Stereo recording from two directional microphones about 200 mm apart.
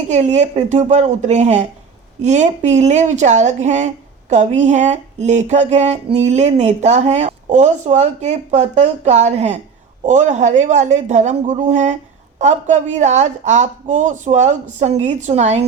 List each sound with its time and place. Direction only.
0.1 s speech: 35° right (ahead or behind)